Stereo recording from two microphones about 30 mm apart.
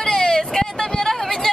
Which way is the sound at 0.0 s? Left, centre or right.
Left.